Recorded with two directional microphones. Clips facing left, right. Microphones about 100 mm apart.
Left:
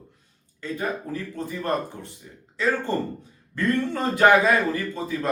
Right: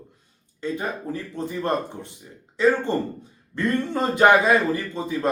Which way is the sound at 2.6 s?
20° right (ahead or behind).